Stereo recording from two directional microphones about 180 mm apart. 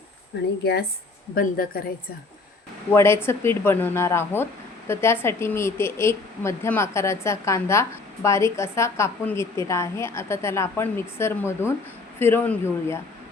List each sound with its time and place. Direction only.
0.6 s a woman's voice: 65° left (ahead or behind)
2.9 s a woman's voice: 15° left (ahead or behind)